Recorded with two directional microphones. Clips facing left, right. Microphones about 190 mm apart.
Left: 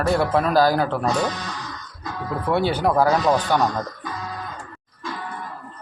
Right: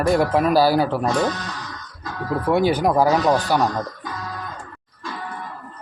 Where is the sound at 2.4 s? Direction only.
15° right (ahead or behind).